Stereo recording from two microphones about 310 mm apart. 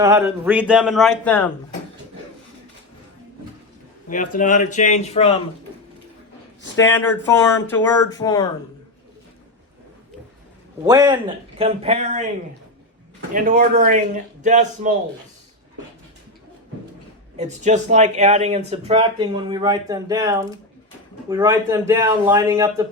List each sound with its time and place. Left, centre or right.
0.0 s a man's voice: centre
4.4 s speech: left
6.7 s speech: centre
10.8 s speech: centre
13.3 s speech: right
17.3 s a man's voice: right